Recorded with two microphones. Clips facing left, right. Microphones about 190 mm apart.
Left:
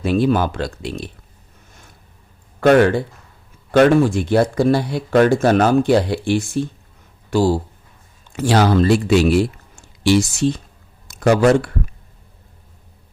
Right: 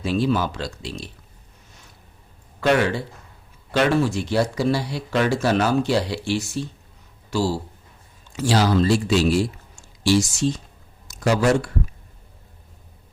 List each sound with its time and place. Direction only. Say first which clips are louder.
0.0 s speech: left 5 dB; 55° left (ahead or behind)
2.6 s a man's voice: left 7 dB; 50° left (ahead or behind)